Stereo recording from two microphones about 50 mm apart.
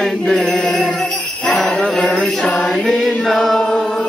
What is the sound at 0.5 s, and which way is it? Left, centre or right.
Jingle bell, centre.